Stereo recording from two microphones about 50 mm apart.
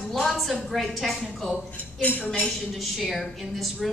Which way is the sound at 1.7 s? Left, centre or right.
Left.